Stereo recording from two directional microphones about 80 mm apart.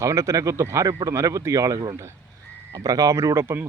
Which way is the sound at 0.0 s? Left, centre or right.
Right.